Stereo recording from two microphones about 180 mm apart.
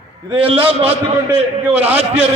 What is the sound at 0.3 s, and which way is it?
Speech, 30° right (ahead or behind).